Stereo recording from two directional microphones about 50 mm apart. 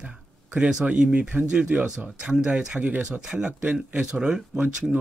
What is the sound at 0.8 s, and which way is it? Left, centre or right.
Speech, right.